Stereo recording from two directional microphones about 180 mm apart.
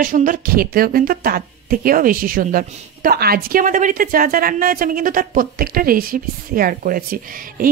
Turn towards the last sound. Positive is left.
turn(degrees=-50)  # may be behind; listen again after turning